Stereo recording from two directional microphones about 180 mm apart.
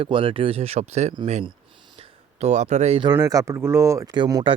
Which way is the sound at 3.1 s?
20° right (ahead or behind).